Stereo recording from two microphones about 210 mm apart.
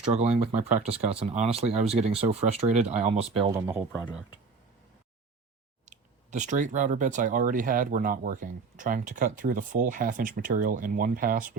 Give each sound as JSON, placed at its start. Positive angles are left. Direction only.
{"t": 0.1, "sound": "speech", "side_deg": -30}
{"t": 3.5, "sound": "speech", "side_deg": -10}
{"t": 5.8, "sound": "speech", "side_deg": -35}